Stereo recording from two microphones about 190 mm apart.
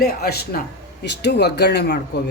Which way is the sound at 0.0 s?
55° left (ahead or behind).